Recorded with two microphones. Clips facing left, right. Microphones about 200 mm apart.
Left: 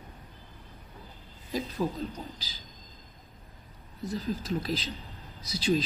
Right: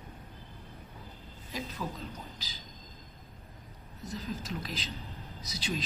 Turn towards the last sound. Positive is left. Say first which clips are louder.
# left 9 dB
turn(degrees=30)  # may be behind; listen again after turning